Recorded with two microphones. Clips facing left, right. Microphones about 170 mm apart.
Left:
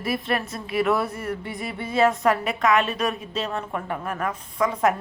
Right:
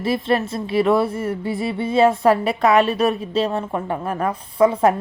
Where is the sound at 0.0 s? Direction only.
25° right (ahead or behind).